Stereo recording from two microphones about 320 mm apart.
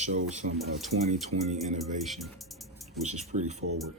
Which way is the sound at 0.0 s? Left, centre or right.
Right.